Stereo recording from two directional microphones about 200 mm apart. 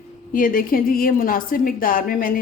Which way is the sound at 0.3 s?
45° left (ahead or behind).